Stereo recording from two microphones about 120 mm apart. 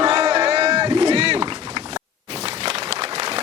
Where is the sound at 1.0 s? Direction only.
60° right (ahead or behind).